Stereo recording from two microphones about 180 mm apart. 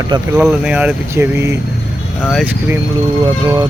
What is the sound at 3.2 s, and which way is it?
Speech, 20° right (ahead or behind).